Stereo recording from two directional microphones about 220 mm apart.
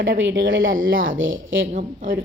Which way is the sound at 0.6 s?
40° right (ahead or behind).